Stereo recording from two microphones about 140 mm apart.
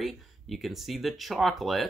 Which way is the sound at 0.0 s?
Centre (ahead or behind).